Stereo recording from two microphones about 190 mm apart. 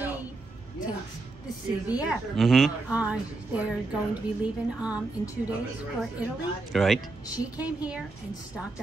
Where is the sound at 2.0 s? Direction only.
Centre (ahead or behind).